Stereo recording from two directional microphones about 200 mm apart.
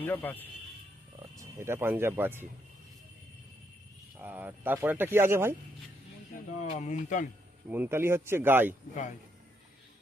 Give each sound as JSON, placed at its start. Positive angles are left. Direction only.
{"t": 0.0, "sound": "a man's voice", "side_deg": 10}
{"t": 1.2, "sound": "speech", "side_deg": -15}
{"t": 4.2, "sound": "speech", "side_deg": -10}
{"t": 6.6, "sound": "speech", "side_deg": 35}
{"t": 7.7, "sound": "speech", "side_deg": -10}